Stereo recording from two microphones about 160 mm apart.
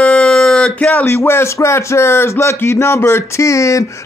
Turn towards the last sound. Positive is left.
turn(degrees=20)  # may be behind; listen again after turning